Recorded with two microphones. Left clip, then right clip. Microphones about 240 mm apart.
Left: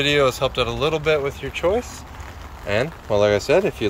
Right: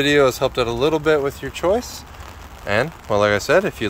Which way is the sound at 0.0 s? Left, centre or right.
Right.